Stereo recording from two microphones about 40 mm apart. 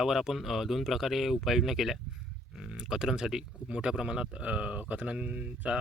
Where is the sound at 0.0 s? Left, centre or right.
Centre.